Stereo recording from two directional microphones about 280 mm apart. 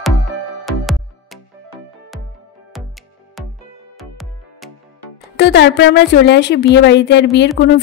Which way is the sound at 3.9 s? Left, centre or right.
Centre.